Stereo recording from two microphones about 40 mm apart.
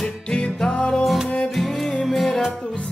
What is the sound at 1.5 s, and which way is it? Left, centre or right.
Music, centre.